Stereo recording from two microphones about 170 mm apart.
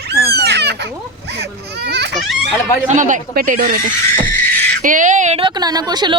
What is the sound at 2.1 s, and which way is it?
Goat, centre (ahead or behind).